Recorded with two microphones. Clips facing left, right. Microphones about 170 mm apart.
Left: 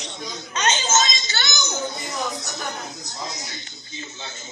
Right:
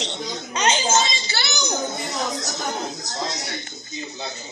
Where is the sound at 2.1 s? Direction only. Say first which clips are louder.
Right 2 dB; 90° right.